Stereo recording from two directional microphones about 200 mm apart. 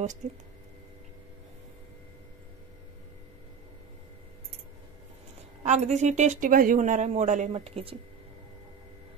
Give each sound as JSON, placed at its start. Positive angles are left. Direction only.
{"t": 0.2, "sound": "speech", "side_deg": -35}
{"t": 5.6, "sound": "speech", "side_deg": -35}